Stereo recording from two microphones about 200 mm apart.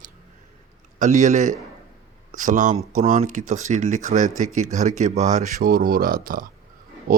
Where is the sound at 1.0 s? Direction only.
40° right (ahead or behind).